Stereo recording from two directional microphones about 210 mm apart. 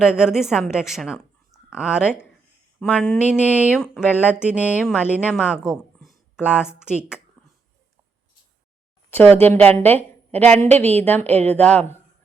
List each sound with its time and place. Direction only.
0.0 s a woman's voice: 5° right (ahead or behind)
4.5 s a woman's voice: 5° right (ahead or behind)
9.0 s a woman's voice: 10° left (ahead or behind)